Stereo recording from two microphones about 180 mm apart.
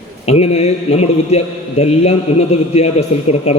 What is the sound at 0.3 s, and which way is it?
A man's voice, 35° left (ahead or behind).